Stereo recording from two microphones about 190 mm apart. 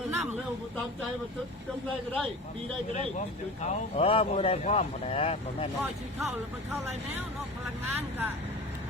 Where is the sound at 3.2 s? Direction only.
35° left (ahead or behind).